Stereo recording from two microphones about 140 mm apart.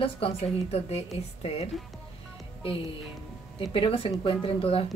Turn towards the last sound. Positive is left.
turn(degrees=40)  # may be behind; listen again after turning